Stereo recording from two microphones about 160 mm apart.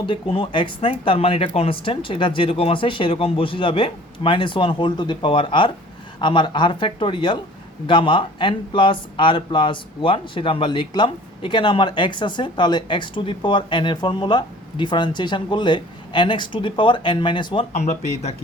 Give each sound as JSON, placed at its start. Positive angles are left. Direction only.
{"t": 0.0, "sound": "speech", "side_deg": 30}